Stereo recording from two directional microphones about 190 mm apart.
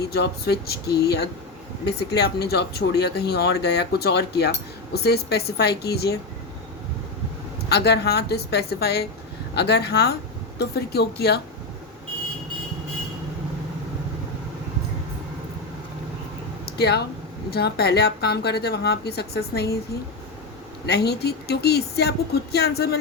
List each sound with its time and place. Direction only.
0.1 s speech: 60° left (ahead or behind)
7.7 s speech: 60° left (ahead or behind)
16.6 s speech: 60° left (ahead or behind)
20.8 s speech: 60° left (ahead or behind)